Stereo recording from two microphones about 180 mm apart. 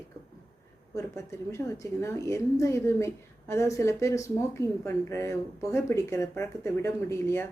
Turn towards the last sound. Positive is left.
turn(degrees=15)  # may be behind; listen again after turning